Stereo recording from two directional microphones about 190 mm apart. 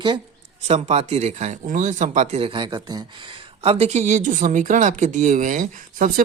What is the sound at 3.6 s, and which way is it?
Speech, 30° right (ahead or behind).